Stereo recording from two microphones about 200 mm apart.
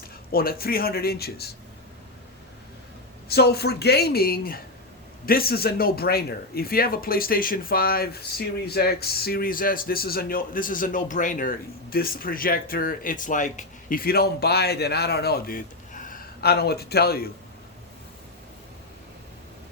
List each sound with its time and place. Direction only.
0.3 s speech: 50° left (ahead or behind)
3.2 s speech: 55° left (ahead or behind)